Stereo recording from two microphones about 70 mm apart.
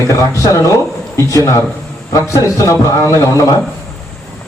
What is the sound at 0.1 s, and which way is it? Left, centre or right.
A man's voice, left.